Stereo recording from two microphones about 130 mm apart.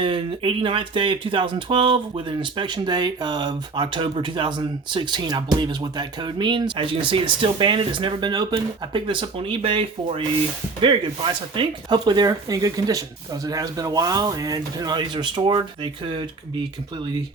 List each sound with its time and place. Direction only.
0.0 s speech: 40° right (ahead or behind)